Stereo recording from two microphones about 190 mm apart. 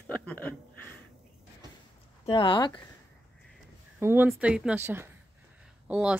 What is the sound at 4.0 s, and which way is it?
Speech, 10° right (ahead or behind).